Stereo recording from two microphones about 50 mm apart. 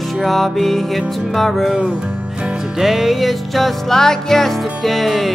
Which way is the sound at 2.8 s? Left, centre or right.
Centre.